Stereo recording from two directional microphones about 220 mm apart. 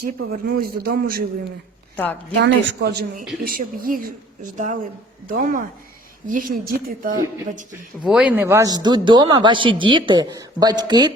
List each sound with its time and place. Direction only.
0.0 s a man's voice: 45° right (ahead or behind)
2.4 s a man's voice: 50° right (ahead or behind)
8.0 s a man's voice: 5° right (ahead or behind)